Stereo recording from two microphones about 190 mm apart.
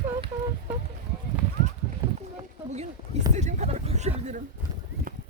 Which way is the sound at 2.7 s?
35° right (ahead or behind).